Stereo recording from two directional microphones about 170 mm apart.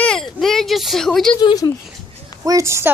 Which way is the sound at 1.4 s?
25° left (ahead or behind).